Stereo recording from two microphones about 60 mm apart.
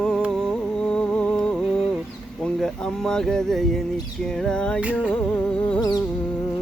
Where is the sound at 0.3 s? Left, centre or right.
Centre.